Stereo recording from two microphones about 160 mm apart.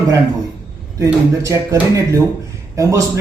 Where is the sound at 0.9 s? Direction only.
20° right (ahead or behind).